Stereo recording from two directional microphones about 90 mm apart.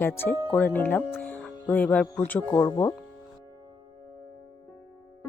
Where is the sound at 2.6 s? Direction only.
40° left (ahead or behind).